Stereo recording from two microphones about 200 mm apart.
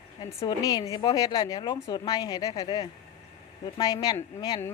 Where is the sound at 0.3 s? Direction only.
20° left (ahead or behind).